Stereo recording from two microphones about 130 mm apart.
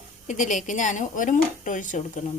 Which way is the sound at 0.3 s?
75° left (ahead or behind).